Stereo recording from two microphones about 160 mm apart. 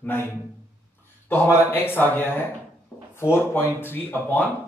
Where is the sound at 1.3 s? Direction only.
15° left (ahead or behind).